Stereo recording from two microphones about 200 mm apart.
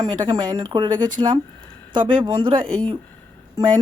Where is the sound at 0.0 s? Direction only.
20° right (ahead or behind).